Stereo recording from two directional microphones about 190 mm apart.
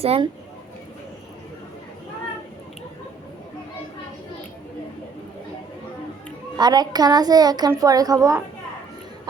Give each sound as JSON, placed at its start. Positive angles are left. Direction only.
{"t": 0.0, "sound": "speech", "side_deg": -30}
{"t": 6.6, "sound": "a child's voice", "side_deg": -20}